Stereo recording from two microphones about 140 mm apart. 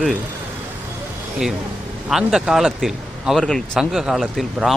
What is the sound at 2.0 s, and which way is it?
Speech, 5° right (ahead or behind).